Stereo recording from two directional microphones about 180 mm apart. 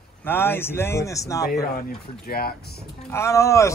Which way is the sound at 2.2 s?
55° left (ahead or behind).